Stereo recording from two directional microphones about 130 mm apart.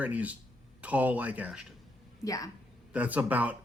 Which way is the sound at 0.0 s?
10° right (ahead or behind).